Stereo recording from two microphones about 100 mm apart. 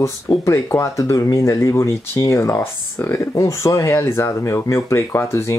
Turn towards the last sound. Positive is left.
turn(degrees=25)  # may be behind; listen again after turning